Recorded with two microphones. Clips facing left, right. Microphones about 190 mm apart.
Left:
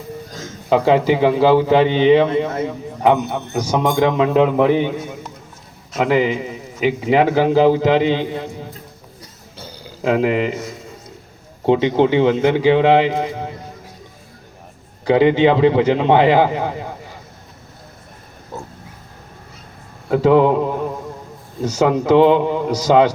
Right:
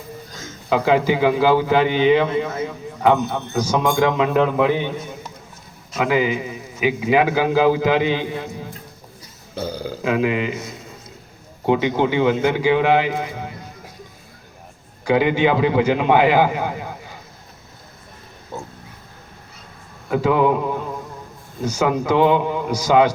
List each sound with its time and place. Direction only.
0.7 s a man's voice: 30° left (ahead or behind)
3.1 s a man's voice: 20° left (ahead or behind)
6.0 s a man's voice: 25° left (ahead or behind)
9.6 s burping: 50° right (ahead or behind)
10.0 s mantra: 30° left (ahead or behind)
11.6 s a man's voice: 30° left (ahead or behind)
15.0 s a man's voice: 30° left (ahead or behind)
18.5 s wild animals: centre (ahead or behind)
20.1 s mantra: 30° left (ahead or behind)
21.8 s mantra: 35° left (ahead or behind)
22.9 s a man's voice: 30° left (ahead or behind)